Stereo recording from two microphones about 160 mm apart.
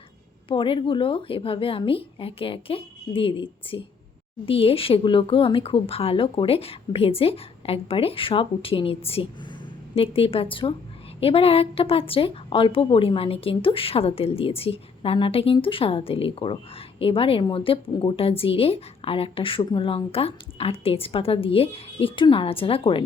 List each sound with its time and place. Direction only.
0.4 s a woman's voice: 30° left (ahead or behind)